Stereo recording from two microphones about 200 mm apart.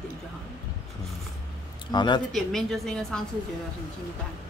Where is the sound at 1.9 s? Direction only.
20° left (ahead or behind).